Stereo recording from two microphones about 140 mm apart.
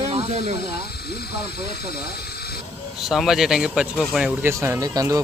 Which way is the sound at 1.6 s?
90° left.